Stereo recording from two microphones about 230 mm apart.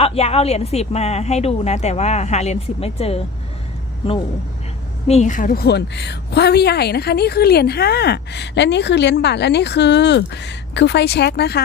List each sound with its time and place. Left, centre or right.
0.0 s speech: left
5.0 s a woman's voice: left